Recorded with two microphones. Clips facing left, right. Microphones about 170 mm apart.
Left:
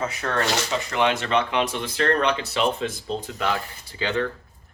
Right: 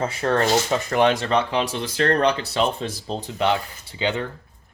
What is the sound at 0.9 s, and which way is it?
Speech, 45° right (ahead or behind).